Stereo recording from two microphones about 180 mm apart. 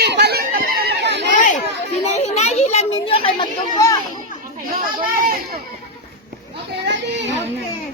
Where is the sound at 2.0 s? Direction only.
35° left (ahead or behind).